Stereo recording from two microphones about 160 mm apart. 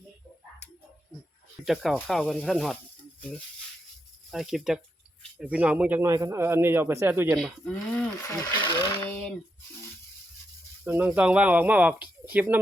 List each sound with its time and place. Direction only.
1.6 s speech: centre (ahead or behind)
4.3 s speech: centre (ahead or behind)
7.3 s speech: 5° left (ahead or behind)
8.2 s speech: 20° left (ahead or behind)
9.0 s a sound: 10° left (ahead or behind)
10.8 s speech: 10° right (ahead or behind)